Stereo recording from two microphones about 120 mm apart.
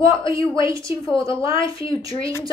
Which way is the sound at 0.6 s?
25° right (ahead or behind).